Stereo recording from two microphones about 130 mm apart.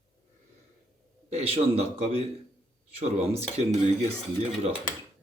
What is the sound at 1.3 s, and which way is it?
A man's voice, 55° right (ahead or behind).